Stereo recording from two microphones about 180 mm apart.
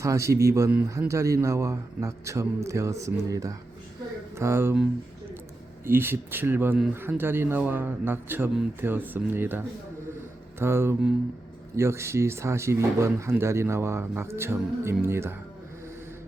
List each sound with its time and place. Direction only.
0.0 s speech: 15° right (ahead or behind)